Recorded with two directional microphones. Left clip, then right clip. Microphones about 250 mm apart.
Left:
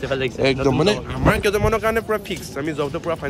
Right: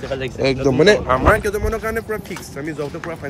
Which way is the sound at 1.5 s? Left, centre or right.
Centre.